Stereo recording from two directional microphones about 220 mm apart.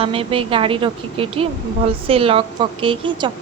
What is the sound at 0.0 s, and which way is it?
A woman's voice, 25° right (ahead or behind).